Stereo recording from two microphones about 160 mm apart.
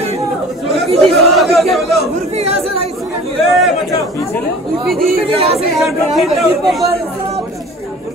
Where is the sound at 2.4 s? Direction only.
40° right (ahead or behind).